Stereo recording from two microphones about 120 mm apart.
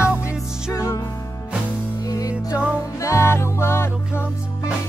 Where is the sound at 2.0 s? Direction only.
30° left (ahead or behind).